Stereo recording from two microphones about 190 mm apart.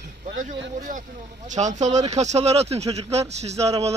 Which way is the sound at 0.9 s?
45° right (ahead or behind).